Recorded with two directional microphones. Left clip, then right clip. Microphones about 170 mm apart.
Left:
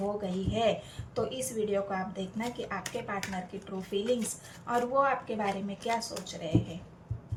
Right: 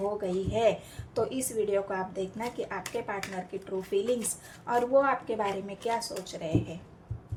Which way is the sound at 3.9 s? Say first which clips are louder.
Right 1 dB; 35° right (ahead or behind).